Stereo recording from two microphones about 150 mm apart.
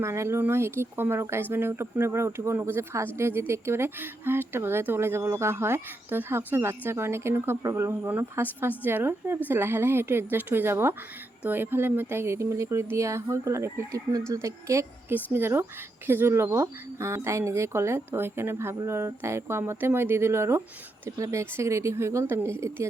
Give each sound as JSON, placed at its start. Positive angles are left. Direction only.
{"t": 0.0, "sound": "speech", "side_deg": -20}